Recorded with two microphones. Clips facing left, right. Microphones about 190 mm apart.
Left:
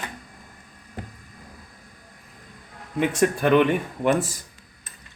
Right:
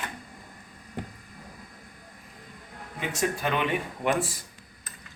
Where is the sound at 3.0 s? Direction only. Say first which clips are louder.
Left 8 dB; 55° left (ahead or behind).